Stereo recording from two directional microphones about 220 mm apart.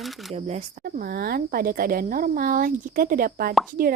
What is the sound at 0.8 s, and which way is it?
Speech, 45° right (ahead or behind).